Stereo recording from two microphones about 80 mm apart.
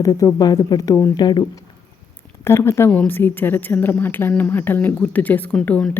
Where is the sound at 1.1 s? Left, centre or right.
Left.